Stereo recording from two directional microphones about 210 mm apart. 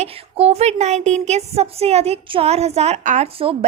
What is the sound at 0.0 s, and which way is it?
Speech, 30° right (ahead or behind).